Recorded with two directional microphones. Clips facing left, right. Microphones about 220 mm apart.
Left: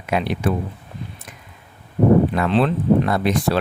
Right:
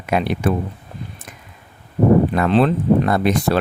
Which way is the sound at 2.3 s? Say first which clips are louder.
Right 3 dB; 45° right (ahead or behind).